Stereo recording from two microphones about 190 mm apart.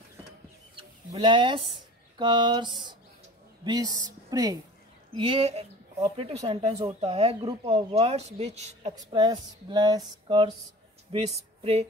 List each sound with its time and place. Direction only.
0.7 s a sound: 25° right (ahead or behind)
2.1 s a woman's voice: 25° right (ahead or behind)
5.1 s speech: 30° right (ahead or behind)
8.9 s speech: 20° right (ahead or behind)